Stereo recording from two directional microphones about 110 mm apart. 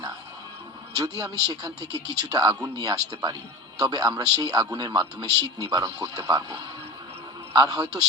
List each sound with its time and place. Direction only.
0.9 s speech: 35° right (ahead or behind)